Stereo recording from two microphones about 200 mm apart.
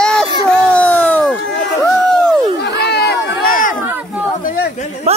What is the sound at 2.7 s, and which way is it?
Crowd, 55° left (ahead or behind).